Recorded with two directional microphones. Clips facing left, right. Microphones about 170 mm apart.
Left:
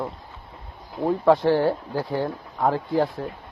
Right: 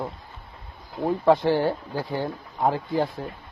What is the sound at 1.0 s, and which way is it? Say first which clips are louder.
Speech: left 1 dB; centre (ahead or behind).